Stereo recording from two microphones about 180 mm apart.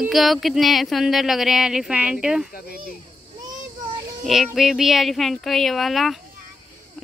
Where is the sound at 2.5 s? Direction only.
55° left (ahead or behind).